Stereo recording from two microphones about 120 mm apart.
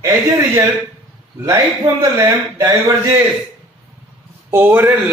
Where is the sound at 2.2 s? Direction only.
25° right (ahead or behind).